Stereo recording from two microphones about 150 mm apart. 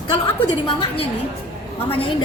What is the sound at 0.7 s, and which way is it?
A woman's voice, 35° left (ahead or behind).